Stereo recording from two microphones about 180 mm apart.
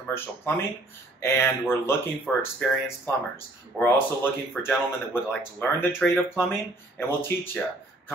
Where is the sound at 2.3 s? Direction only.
Centre (ahead or behind).